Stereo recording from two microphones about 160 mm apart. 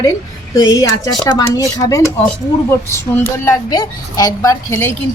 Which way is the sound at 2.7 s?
15° left (ahead or behind).